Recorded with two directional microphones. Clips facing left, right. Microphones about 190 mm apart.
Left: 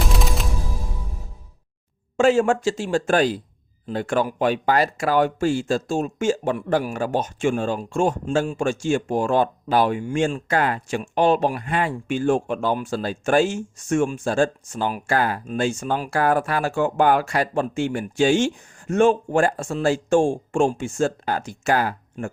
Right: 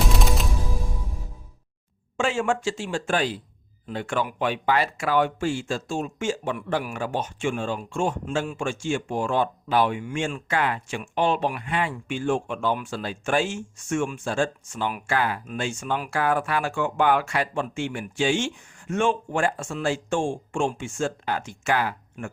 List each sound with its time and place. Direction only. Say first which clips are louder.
0.0 s music: even; centre (ahead or behind)
2.1 s speech: left 7 dB; 40° left (ahead or behind)